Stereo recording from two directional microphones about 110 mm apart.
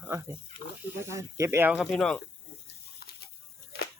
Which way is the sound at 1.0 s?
30° right (ahead or behind).